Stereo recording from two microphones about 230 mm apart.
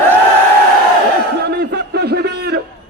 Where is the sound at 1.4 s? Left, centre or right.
Right.